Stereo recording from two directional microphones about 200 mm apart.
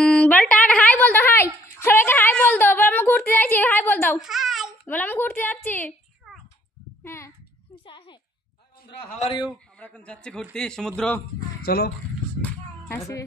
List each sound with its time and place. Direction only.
0.0 s a woman's voice: 5° left (ahead or behind)
4.2 s a child's voice: centre (ahead or behind)
7.1 s a woman's voice: 15° left (ahead or behind)
7.8 s a sound: 25° left (ahead or behind)
8.8 s a man's voice: 25° left (ahead or behind)
9.8 s a woman's voice: 5° left (ahead or behind)
11.6 s speech: 50° left (ahead or behind)
12.4 s music: 10° left (ahead or behind)